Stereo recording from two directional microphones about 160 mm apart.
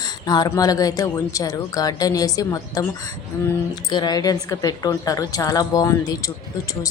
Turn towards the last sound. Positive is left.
turn(degrees=20)  # may be behind; listen again after turning